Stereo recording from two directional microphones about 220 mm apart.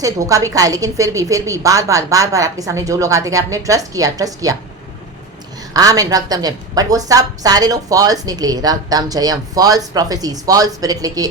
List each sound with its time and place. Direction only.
0.0 s a woman's voice: 15° right (ahead or behind)
5.7 s a woman's voice: 15° right (ahead or behind)